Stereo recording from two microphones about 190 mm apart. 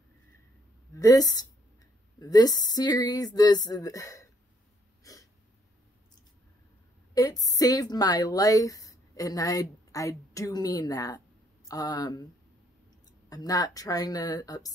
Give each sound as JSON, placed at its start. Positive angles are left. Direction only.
{"t": 0.9, "sound": "speech", "side_deg": 20}
{"t": 5.0, "sound": "a sound", "side_deg": 20}
{"t": 7.2, "sound": "speech", "side_deg": 20}
{"t": 13.3, "sound": "speech", "side_deg": 20}